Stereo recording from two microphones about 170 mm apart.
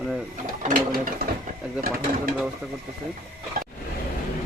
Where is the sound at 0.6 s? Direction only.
55° right (ahead or behind).